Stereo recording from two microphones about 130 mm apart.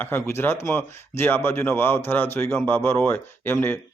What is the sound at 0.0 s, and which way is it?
Speech, 15° left (ahead or behind).